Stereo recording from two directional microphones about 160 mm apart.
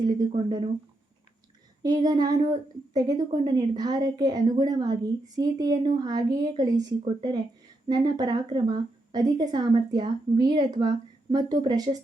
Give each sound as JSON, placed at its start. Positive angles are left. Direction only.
{"t": 0.4, "sound": "speech", "side_deg": -30}
{"t": 1.8, "sound": "a woman's voice", "side_deg": -25}